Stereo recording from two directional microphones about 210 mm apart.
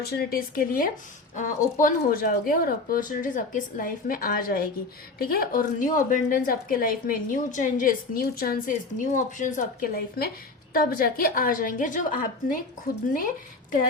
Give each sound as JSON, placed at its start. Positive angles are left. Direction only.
{"t": 0.0, "sound": "a woman's voice", "side_deg": 50}